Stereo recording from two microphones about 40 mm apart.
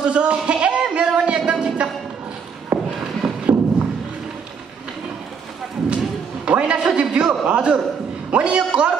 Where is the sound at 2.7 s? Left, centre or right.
Right.